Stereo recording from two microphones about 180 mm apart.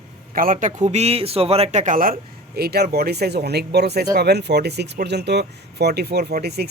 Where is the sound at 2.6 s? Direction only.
60° right (ahead or behind).